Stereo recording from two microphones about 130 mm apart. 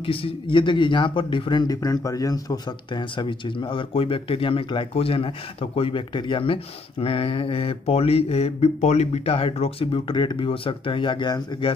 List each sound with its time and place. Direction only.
0.0 s speech: 45° left (ahead or behind)